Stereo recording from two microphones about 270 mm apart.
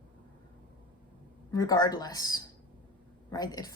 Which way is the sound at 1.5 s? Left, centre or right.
Centre.